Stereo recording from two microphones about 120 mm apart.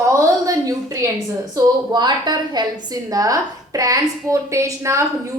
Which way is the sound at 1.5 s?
40° right (ahead or behind).